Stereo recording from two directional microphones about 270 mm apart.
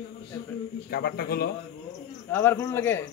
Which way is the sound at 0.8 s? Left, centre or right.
Left.